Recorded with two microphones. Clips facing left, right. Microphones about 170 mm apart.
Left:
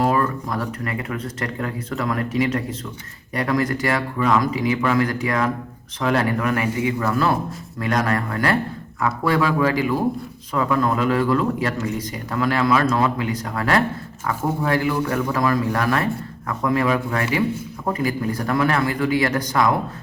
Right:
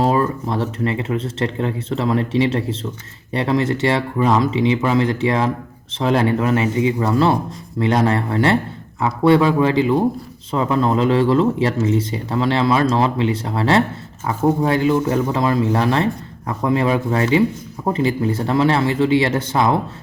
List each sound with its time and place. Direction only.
0.0 s speech: 25° right (ahead or behind)